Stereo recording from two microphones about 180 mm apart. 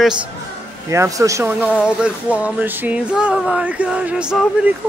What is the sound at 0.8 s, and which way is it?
Speech, 15° right (ahead or behind).